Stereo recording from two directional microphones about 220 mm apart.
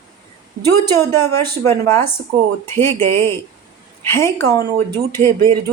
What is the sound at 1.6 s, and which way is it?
A woman's voice, 10° left (ahead or behind).